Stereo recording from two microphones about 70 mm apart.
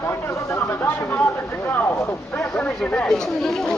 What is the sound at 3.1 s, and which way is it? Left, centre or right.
Speech, centre.